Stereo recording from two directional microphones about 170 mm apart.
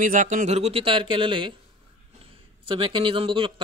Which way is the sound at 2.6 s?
30° right (ahead or behind).